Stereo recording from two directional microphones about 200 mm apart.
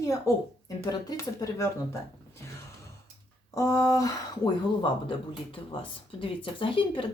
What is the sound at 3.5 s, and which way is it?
Speech, 15° left (ahead or behind).